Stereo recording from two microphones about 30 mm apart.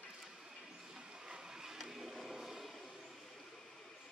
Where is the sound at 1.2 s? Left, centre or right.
Right.